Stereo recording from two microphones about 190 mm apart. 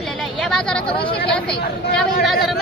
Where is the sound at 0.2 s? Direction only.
5° left (ahead or behind).